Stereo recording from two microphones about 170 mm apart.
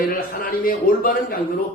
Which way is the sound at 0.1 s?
55° left (ahead or behind).